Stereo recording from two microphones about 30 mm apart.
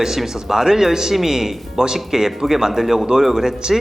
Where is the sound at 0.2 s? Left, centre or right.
Centre.